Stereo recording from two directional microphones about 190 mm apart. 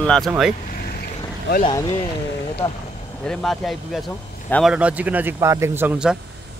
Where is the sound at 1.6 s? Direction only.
20° left (ahead or behind).